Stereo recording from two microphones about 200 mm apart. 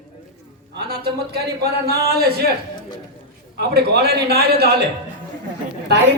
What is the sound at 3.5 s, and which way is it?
A man's voice, 55° right (ahead or behind).